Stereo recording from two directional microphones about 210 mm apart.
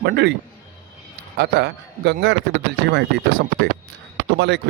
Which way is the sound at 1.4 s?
50° right (ahead or behind).